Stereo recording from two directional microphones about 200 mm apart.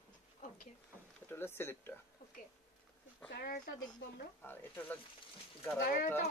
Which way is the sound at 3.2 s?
50° left (ahead or behind).